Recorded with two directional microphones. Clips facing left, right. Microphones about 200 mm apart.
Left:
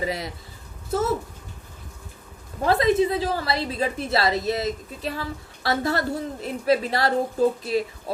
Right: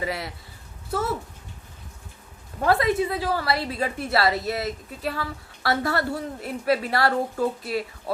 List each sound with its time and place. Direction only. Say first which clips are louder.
0.0 s a woman's voice: left 2 dB; 20° left (ahead or behind)
2.6 s a woman's voice: left 2 dB; 20° left (ahead or behind)